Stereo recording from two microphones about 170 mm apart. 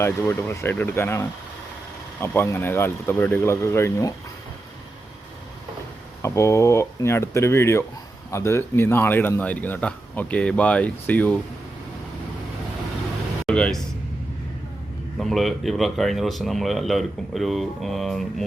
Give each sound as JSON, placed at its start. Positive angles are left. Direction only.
{"t": 0.0, "sound": "speech", "side_deg": 15}
{"t": 6.2, "sound": "speech", "side_deg": 15}
{"t": 13.4, "sound": "a sound", "side_deg": 5}
{"t": 15.2, "sound": "speech", "side_deg": 0}